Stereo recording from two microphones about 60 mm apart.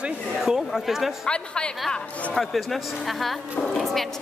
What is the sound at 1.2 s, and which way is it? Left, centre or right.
Speech, centre.